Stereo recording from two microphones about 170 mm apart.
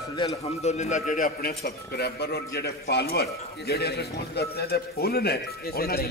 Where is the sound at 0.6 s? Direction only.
40° left (ahead or behind).